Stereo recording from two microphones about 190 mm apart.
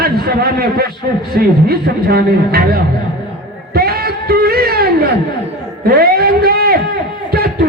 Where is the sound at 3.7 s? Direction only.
55° right (ahead or behind).